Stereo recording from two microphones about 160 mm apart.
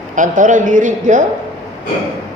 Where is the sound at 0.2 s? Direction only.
50° right (ahead or behind).